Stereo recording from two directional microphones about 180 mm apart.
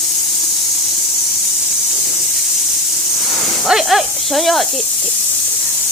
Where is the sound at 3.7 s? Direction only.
Centre (ahead or behind).